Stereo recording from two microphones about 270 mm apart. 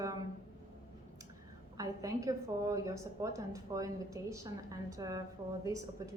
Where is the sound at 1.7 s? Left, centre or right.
Centre.